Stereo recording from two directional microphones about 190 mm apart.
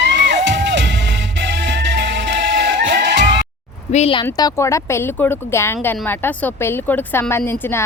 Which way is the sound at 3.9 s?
30° left (ahead or behind).